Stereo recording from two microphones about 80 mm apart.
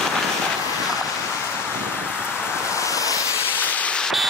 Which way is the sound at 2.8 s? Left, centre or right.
Left.